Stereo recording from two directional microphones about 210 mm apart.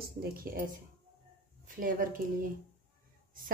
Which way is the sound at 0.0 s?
45° right (ahead or behind).